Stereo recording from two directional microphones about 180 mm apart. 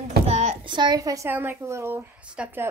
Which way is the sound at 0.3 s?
40° right (ahead or behind).